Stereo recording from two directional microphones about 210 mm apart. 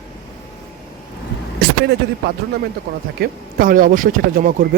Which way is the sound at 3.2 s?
40° right (ahead or behind).